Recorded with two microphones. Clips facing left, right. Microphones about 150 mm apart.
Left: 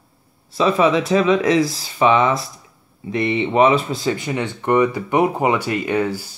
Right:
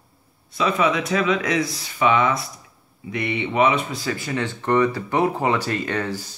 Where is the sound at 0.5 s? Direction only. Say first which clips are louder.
Left 5 dB; 30° left (ahead or behind).